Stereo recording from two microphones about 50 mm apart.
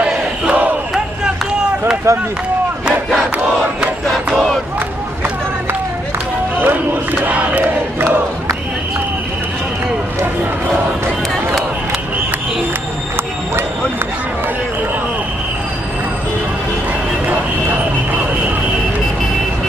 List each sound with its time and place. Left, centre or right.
0.0 s crowd: right
2.1 s speech: right
6.6 s crowd: right